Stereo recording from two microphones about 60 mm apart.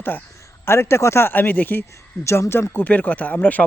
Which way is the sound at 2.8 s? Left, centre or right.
Left.